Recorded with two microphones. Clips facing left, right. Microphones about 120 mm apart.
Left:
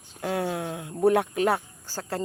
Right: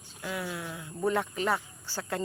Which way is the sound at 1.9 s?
35° left (ahead or behind).